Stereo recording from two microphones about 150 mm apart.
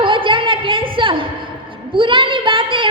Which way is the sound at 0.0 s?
35° right (ahead or behind).